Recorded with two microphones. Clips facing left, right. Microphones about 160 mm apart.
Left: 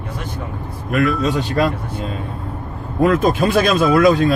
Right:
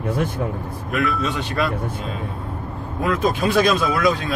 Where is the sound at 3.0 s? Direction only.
45° left (ahead or behind).